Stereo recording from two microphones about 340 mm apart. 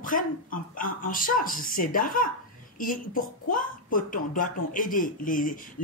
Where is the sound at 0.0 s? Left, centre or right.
Left.